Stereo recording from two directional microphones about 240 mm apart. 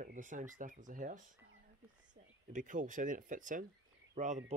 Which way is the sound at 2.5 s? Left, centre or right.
Right.